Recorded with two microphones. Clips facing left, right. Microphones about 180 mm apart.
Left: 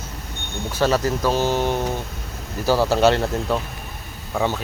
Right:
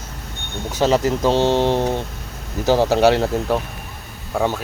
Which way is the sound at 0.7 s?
20° right (ahead or behind).